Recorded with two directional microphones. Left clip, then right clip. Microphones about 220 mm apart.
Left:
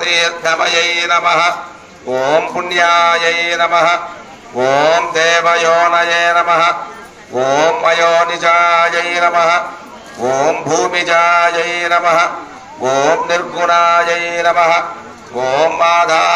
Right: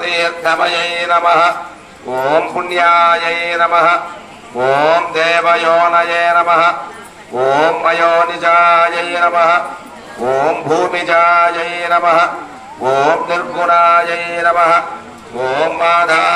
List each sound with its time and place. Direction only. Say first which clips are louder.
0.0 s mantra: left 1 dB; 50° left (ahead or behind)
15.4 s mantra: left 2 dB; 35° left (ahead or behind)